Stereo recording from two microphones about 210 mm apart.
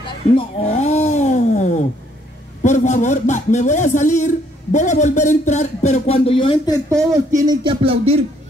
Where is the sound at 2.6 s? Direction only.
35° left (ahead or behind).